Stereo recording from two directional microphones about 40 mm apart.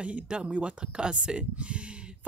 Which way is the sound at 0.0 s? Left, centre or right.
Right.